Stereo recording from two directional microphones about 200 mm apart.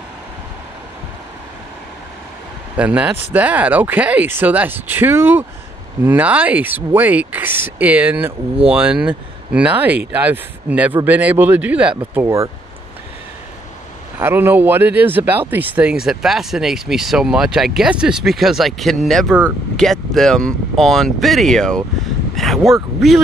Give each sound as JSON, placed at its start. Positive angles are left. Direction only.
{"t": 2.8, "sound": "speech", "side_deg": -5}
{"t": 14.1, "sound": "speech", "side_deg": -10}